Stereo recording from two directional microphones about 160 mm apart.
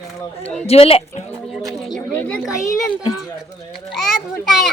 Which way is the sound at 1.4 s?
Centre (ahead or behind).